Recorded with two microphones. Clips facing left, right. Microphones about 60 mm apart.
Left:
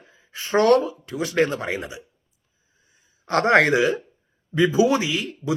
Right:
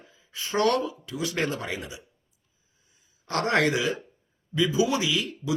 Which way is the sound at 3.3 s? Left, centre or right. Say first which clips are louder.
Left 7 dB; left.